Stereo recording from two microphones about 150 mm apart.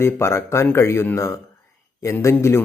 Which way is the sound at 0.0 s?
15° left (ahead or behind).